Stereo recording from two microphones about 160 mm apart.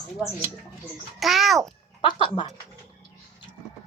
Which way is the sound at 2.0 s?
30° left (ahead or behind).